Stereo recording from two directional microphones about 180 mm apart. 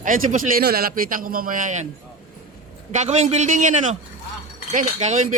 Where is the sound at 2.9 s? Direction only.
40° right (ahead or behind).